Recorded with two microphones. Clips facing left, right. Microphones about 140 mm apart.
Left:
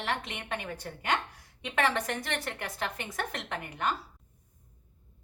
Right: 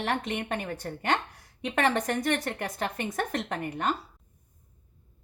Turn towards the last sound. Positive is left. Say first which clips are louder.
# right 3 dB
turn(degrees=-40)  # may be behind; listen again after turning